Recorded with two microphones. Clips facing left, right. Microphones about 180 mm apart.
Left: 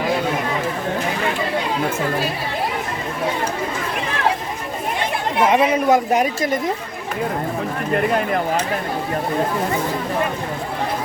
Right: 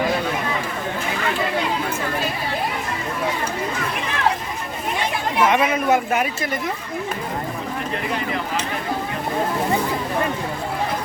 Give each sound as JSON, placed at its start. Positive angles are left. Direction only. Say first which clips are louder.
{"t": 5.4, "sound": "speech", "louder": "left 2 dB", "side_deg": 30}